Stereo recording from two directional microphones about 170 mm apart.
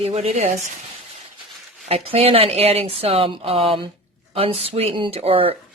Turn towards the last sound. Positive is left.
turn(degrees=-35)  # may be behind; listen again after turning